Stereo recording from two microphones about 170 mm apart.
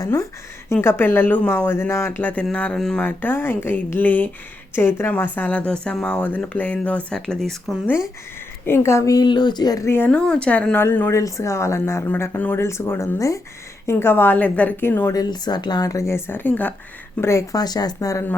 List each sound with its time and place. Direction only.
0.0 s speech: 20° left (ahead or behind); by 7.9 s centre (ahead or behind)
8.6 s speech: 15° left (ahead or behind)